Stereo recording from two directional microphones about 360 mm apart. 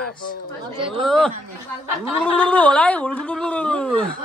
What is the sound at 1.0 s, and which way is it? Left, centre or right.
Speech, centre.